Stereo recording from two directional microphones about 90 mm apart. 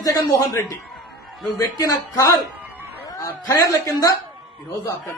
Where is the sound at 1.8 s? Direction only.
35° left (ahead or behind).